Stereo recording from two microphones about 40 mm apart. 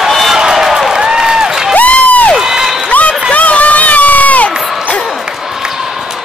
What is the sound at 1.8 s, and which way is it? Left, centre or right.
Crowd, left.